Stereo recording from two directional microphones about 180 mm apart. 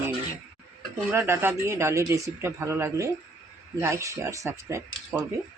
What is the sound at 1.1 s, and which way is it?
A man's voice, 15° right (ahead or behind).